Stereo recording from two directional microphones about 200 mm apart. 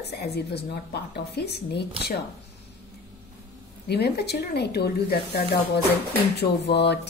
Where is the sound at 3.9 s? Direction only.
55° left (ahead or behind).